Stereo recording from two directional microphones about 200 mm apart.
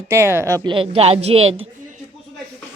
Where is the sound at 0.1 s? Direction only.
15° right (ahead or behind); by 2.0 s 30° right (ahead or behind).